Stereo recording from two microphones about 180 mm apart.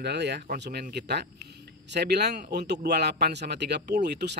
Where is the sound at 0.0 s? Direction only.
70° right (ahead or behind).